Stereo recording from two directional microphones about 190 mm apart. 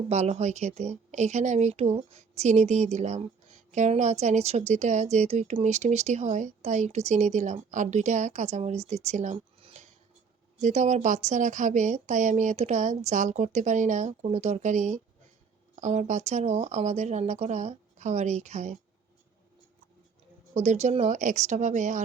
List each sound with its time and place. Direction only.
0.1 s a woman's voice: 35° right (ahead or behind)
20.5 s a woman's voice: 35° right (ahead or behind)